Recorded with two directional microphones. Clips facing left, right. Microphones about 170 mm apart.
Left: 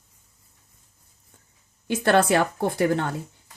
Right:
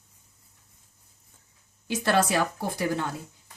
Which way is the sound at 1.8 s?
55° left (ahead or behind).